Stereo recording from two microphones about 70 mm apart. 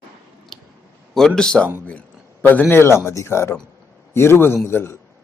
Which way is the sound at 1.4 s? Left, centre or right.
Centre.